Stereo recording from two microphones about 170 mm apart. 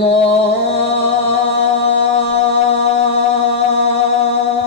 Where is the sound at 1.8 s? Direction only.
35° left (ahead or behind).